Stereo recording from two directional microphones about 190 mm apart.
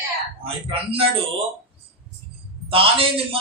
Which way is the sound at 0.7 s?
30° right (ahead or behind).